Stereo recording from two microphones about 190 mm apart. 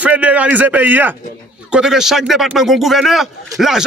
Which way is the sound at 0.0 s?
5° right (ahead or behind).